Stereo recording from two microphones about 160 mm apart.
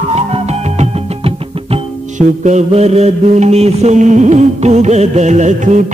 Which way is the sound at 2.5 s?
45° right (ahead or behind).